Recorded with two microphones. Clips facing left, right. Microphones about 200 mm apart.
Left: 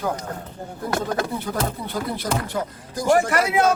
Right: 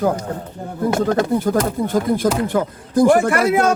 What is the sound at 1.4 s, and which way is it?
Speech, 45° right (ahead or behind).